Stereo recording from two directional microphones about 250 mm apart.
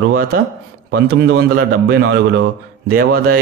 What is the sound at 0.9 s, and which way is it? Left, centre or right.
A man's voice, right.